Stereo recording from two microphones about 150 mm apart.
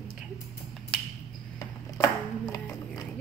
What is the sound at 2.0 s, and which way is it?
Chopping, 25° left (ahead or behind).